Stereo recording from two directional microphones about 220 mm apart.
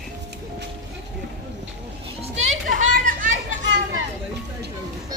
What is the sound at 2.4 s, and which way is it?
Children playing, 35° right (ahead or behind).